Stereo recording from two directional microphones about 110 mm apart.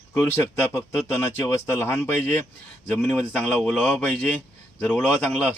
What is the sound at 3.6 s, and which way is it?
Speech, 10° left (ahead or behind).